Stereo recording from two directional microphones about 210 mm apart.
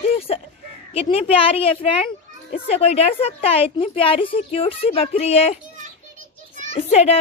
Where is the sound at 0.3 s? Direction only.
30° left (ahead or behind).